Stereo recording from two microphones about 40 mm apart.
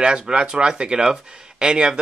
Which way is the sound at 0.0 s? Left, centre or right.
Right.